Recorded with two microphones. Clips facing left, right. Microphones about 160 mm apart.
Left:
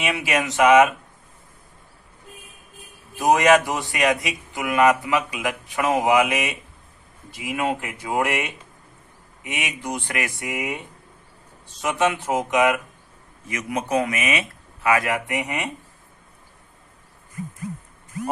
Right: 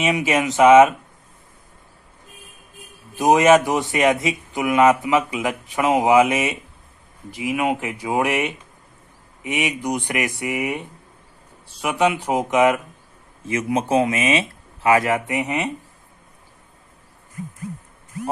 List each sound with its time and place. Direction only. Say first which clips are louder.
0.0 s speech: right 4 dB; 20° right (ahead or behind)
3.2 s speech: right 3 dB; 20° right (ahead or behind)
11.8 s speech: right 2 dB; 15° right (ahead or behind)